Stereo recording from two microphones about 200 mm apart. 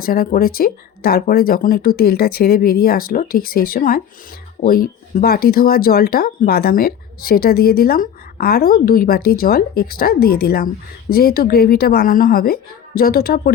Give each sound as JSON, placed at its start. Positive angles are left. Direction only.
{"t": 0.0, "sound": "speech", "side_deg": 45}